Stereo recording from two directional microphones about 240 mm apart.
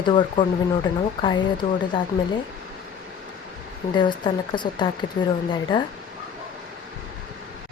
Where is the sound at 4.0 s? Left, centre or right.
Centre.